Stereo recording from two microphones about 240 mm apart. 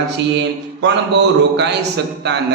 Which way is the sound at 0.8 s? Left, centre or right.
Right.